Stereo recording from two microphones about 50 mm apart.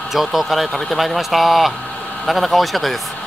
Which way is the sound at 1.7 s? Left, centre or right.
Left.